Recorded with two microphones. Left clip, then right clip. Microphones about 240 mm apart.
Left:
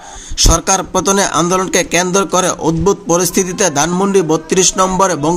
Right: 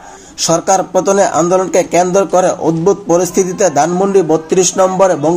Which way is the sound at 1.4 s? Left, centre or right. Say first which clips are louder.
Right 3 dB; left.